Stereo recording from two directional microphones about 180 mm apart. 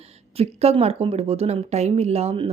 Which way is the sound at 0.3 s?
35° right (ahead or behind).